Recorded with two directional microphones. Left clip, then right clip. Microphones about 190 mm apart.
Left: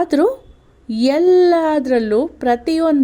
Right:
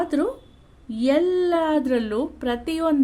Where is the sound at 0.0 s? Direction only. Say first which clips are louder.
Left 8 dB; 40° left (ahead or behind).